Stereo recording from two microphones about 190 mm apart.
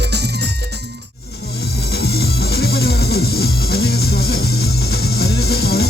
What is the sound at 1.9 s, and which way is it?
Music, 55° left (ahead or behind).